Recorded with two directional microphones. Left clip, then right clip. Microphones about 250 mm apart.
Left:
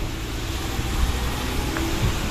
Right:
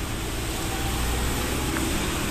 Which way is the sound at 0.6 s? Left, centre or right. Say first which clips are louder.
Even; right.